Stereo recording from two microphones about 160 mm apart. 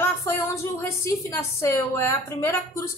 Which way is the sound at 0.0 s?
15° left (ahead or behind).